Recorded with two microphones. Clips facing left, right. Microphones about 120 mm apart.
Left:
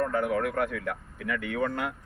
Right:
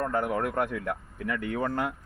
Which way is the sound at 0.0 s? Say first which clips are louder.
Left 1 dB; 20° right (ahead or behind).